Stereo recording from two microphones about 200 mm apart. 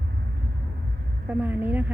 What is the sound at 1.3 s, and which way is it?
Speech, 10° right (ahead or behind).